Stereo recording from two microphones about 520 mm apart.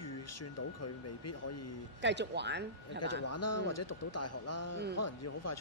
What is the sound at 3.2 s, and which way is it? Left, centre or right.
Speech, left.